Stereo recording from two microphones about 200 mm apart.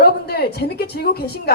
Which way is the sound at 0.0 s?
50° left (ahead or behind).